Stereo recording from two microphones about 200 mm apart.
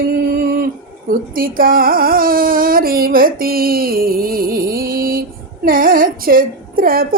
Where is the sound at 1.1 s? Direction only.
45° right (ahead or behind).